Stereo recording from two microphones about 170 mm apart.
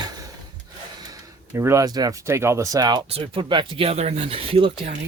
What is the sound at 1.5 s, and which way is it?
Speech, 15° right (ahead or behind).